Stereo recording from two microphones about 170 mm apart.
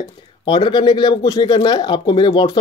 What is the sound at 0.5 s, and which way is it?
Speech, 25° left (ahead or behind).